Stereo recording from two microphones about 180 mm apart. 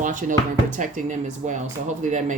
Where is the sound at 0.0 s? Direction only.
45° right (ahead or behind).